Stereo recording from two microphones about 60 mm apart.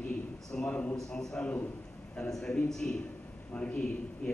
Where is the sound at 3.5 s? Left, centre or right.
Centre.